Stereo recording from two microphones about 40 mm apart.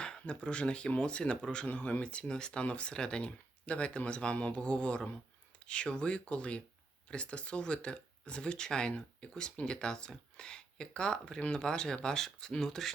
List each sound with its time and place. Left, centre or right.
0.0 s speech: left
1.6 s speech: left
2.2 s speech: left